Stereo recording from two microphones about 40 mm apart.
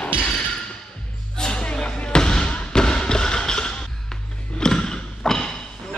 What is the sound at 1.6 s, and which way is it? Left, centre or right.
Basketball bounce, left.